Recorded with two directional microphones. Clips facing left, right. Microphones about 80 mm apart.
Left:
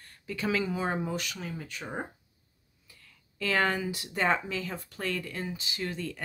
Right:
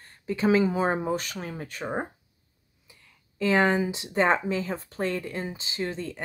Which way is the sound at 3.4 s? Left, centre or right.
Right.